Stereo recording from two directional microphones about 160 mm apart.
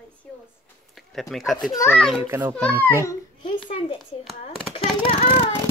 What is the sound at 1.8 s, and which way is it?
Speech, 10° left (ahead or behind).